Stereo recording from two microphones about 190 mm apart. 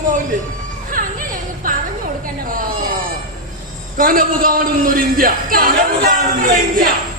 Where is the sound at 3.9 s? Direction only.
45° right (ahead or behind).